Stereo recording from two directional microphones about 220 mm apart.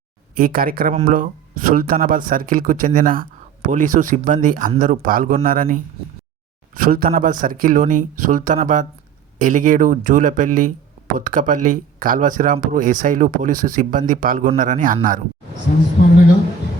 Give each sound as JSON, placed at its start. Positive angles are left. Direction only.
{"t": 0.3, "sound": "speech", "side_deg": -40}